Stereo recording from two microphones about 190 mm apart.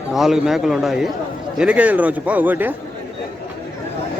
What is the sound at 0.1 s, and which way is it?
A man's voice, centre (ahead or behind).